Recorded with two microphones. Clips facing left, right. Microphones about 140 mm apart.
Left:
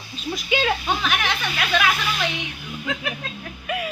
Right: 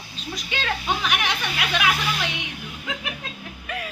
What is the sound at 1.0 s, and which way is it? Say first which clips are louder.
Speech: left 1 dB; 15° right (ahead or behind).